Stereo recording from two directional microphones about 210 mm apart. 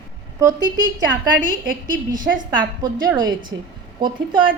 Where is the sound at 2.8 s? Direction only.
20° right (ahead or behind).